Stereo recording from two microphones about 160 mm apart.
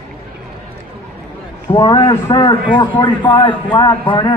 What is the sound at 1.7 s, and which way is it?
A man's voice, 25° left (ahead or behind).